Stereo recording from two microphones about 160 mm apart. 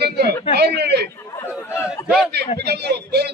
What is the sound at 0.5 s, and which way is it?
Speech, 90° right.